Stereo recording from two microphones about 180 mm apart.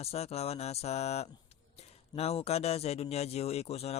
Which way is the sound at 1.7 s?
35° left (ahead or behind).